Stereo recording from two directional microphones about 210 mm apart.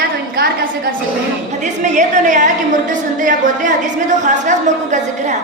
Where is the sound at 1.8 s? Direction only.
35° right (ahead or behind).